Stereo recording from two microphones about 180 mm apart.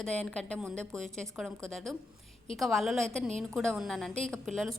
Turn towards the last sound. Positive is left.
turn(degrees=0)  # may be behind; listen again after turning